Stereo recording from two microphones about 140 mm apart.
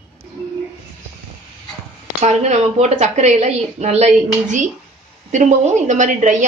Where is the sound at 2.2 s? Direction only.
50° right (ahead or behind).